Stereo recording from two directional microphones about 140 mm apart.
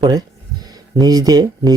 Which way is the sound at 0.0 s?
25° right (ahead or behind).